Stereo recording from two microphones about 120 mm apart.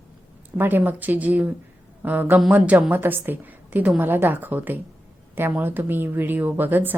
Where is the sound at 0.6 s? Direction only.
15° right (ahead or behind).